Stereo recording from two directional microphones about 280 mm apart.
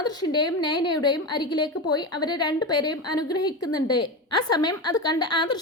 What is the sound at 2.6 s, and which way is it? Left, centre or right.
Speech, left.